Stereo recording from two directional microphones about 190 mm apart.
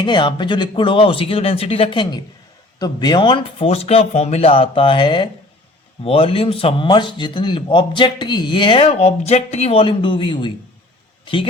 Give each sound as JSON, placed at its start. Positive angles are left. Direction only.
{"t": 0.0, "sound": "speech", "side_deg": 25}